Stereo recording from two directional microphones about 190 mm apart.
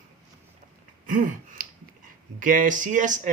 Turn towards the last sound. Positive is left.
turn(degrees=-40)  # may be behind; listen again after turning